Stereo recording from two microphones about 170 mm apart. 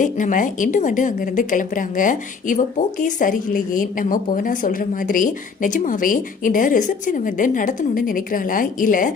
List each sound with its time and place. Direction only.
0.0 s a woman's voice: 50° left (ahead or behind)